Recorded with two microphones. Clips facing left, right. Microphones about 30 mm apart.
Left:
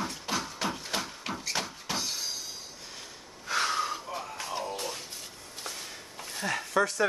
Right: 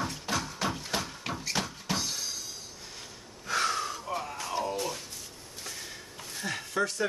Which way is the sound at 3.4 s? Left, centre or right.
Centre.